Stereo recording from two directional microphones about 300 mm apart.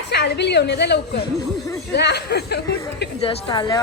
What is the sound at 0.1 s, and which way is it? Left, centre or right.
A woman's voice, left.